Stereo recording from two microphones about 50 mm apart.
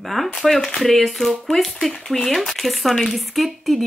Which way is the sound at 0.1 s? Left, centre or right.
Centre.